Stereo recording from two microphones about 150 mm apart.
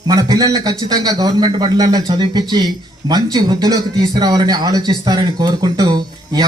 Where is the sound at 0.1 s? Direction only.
25° right (ahead or behind).